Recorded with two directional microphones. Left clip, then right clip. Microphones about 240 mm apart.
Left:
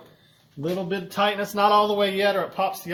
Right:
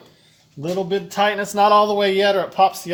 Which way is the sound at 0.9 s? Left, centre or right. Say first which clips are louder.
Right 5 dB; centre.